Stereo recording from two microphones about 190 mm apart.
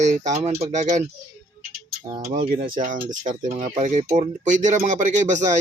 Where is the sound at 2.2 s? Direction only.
45° right (ahead or behind).